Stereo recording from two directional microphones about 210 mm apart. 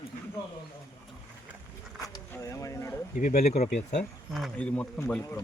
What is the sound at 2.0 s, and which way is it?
Speech, 15° left (ahead or behind).